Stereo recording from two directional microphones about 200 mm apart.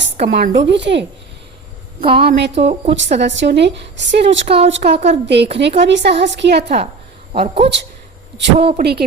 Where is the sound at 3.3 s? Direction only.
60° right (ahead or behind).